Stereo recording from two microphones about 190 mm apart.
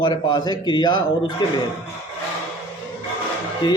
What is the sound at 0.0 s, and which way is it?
A man's voice, 25° left (ahead or behind).